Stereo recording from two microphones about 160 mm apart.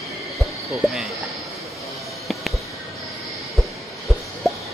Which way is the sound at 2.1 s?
Centre (ahead or behind).